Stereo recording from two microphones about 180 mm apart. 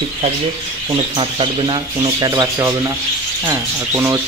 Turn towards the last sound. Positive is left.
turn(degrees=-15)  # may be behind; listen again after turning